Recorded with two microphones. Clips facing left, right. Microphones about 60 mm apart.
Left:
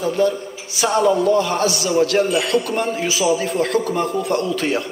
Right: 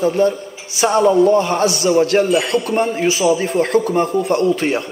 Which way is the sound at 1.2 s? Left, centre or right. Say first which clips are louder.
Right 3 dB; right.